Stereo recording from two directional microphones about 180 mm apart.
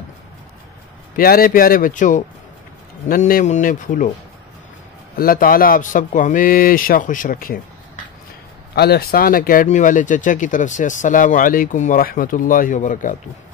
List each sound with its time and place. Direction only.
1.1 s speech: 55° left (ahead or behind)
5.1 s speech: 55° left (ahead or behind)
8.7 s speech: 60° left (ahead or behind); by 13.1 s 45° left (ahead or behind)